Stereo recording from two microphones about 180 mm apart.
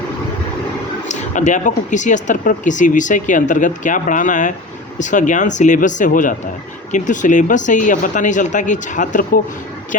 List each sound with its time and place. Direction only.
1.0 s speech: 45° left (ahead or behind)